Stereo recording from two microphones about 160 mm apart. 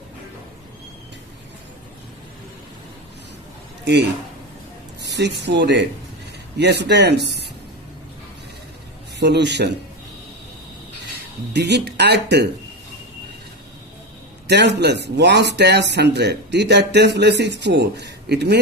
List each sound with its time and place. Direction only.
3.9 s speech: 90° right
9.2 s speech: 90° right
11.5 s speech: 90° right
14.5 s speech: 90° right